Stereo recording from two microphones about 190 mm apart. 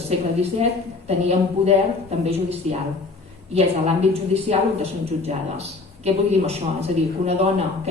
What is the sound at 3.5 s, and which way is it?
A man's voice, 35° right (ahead or behind).